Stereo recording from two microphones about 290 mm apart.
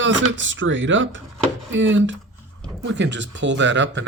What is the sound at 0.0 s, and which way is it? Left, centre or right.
Speech, right.